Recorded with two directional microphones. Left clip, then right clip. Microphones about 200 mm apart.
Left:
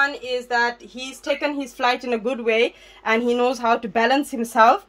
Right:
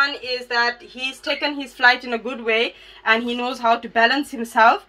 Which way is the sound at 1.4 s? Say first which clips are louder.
Right 7 dB; 55° left (ahead or behind).